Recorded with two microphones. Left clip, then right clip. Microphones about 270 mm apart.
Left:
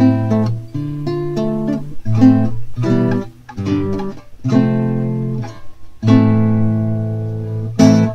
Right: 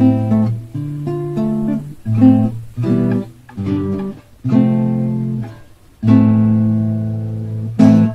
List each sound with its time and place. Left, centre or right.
0.0 s music: left